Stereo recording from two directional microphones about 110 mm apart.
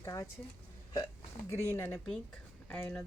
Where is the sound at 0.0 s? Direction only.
30° left (ahead or behind).